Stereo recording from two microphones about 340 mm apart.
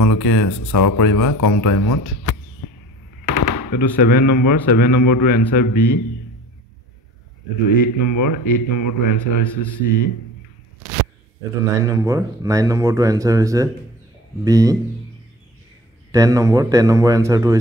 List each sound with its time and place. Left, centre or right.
0.0 s speech: left
2.6 s arrow: left
3.3 s speech: left
7.6 s speech: left
11.7 s speech: centre
16.1 s speech: centre